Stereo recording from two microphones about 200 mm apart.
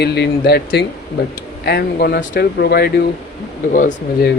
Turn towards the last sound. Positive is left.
turn(degrees=45)  # may be behind; listen again after turning